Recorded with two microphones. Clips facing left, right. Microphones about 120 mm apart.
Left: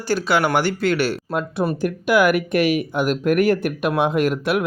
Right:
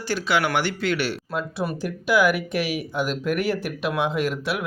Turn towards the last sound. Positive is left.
turn(degrees=50)  # may be behind; listen again after turning